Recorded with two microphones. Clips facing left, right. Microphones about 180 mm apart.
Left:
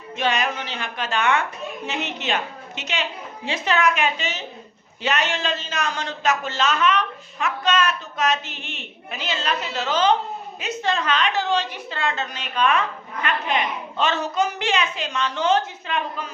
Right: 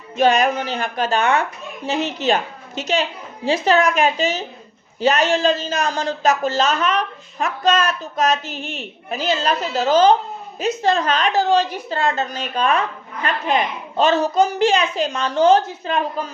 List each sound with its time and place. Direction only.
0.2 s a woman's voice: 45° right (ahead or behind)